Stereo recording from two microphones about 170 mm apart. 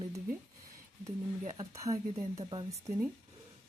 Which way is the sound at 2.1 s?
30° right (ahead or behind).